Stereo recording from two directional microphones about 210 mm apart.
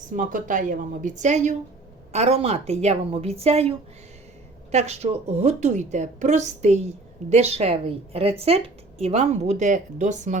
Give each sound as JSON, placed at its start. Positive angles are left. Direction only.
{"t": 0.1, "sound": "a woman's voice", "side_deg": -40}
{"t": 4.7, "sound": "a woman's voice", "side_deg": -30}